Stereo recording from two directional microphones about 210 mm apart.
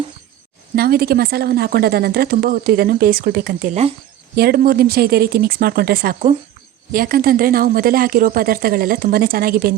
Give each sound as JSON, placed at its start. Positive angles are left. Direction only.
{"t": 0.8, "sound": "a woman's voice", "side_deg": -45}